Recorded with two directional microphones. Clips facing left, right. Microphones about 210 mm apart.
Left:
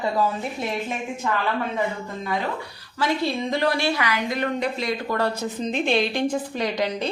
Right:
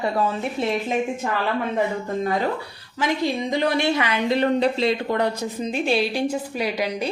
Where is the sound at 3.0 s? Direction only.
15° right (ahead or behind).